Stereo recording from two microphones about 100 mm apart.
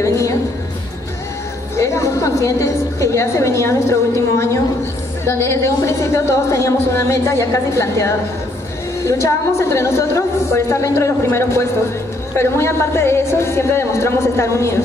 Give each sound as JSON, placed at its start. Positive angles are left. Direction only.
{"t": 0.0, "sound": "a sound", "side_deg": 30}
{"t": 1.8, "sound": "a woman's voice", "side_deg": 30}
{"t": 9.6, "sound": "a woman's voice", "side_deg": 30}